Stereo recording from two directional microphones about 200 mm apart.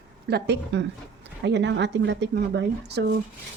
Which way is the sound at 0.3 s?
55° right (ahead or behind).